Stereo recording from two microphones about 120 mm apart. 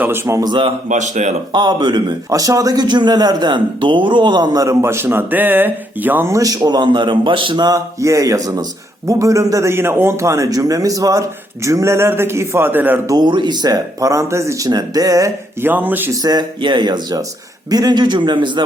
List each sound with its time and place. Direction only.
0.0 s a man's voice: 20° right (ahead or behind)
0.3 s a man's voice: 40° right (ahead or behind)
0.9 s speech: 90° right
1.5 s a man's voice: 40° right (ahead or behind); by 13.0 s 15° right (ahead or behind)
13.1 s a man's voice: 40° right (ahead or behind)
15.6 s speech: 15° right (ahead or behind)
16.1 s a man's voice: 35° right (ahead or behind)